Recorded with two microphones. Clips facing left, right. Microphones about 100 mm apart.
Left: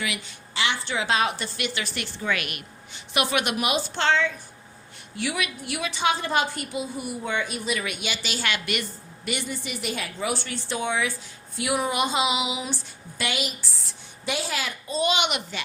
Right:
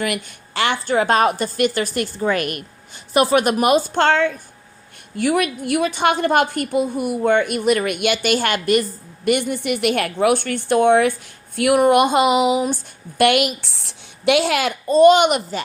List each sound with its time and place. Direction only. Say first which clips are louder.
0.0 s a woman's voice: right 8 dB; 55° right (ahead or behind)
9.6 s speech: right 12 dB; 65° right (ahead or behind); by 15.6 s 40° right (ahead or behind)